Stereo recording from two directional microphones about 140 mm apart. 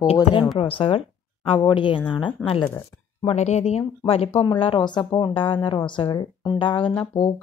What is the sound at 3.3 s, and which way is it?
Speech, 55° left (ahead or behind).